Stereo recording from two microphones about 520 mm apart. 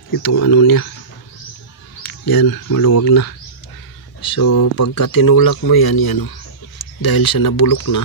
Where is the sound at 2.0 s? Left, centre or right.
Left.